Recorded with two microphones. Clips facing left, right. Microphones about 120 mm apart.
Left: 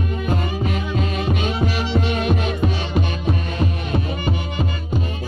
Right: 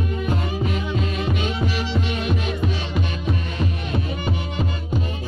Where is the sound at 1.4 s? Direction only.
60° left (ahead or behind).